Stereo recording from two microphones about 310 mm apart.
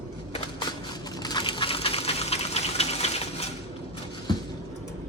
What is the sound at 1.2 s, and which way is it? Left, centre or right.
Sewing machine, centre.